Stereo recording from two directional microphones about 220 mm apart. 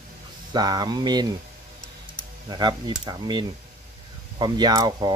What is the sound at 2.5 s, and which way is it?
Speech, 20° right (ahead or behind).